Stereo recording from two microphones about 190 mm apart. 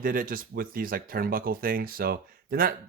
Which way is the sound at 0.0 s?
45° right (ahead or behind).